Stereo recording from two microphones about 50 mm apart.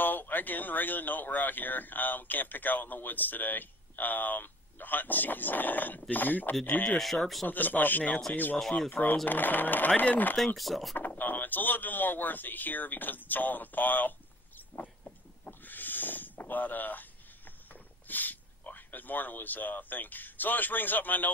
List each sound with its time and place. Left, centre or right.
0.0 s speech: left
10.3 s speech: centre
11.0 s speech: left
14.8 s a sound: left
18.0 s speech: left